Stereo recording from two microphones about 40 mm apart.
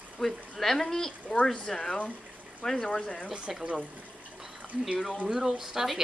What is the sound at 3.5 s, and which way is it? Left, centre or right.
Speech, centre.